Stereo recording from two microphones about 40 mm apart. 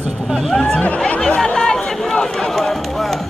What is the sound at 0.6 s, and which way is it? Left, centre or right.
Speech, left.